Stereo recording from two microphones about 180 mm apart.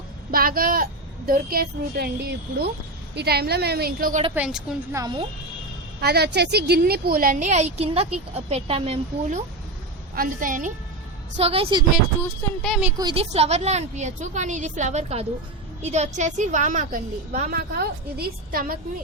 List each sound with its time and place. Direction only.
0.3 s a woman's voice: 55° right (ahead or behind)
4.4 s a woman's voice: 5° right (ahead or behind)
4.9 s speech: 20° right (ahead or behind)
6.0 s a woman's voice: 65° right (ahead or behind); by 9.4 s 35° right (ahead or behind)
10.2 s speech: 50° right (ahead or behind)
11.3 s a woman's voice: 35° right (ahead or behind)
12.2 s speech: centre (ahead or behind)
13.0 s a woman's voice: 30° right (ahead or behind)
17.5 s a woman's voice: 60° right (ahead or behind)